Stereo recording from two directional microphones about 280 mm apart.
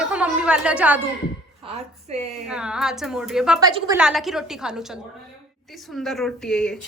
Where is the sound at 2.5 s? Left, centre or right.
Centre.